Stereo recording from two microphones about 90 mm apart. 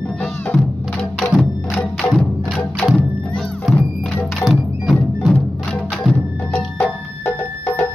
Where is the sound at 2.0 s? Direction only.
15° left (ahead or behind).